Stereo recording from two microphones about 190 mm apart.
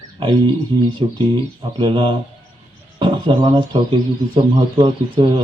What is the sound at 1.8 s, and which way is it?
Speech, 25° right (ahead or behind).